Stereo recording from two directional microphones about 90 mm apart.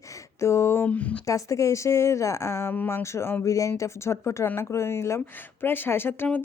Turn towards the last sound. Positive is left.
turn(degrees=25)  # may be behind; listen again after turning